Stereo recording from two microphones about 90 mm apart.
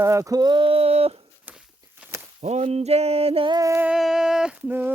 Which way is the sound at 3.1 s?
90° right.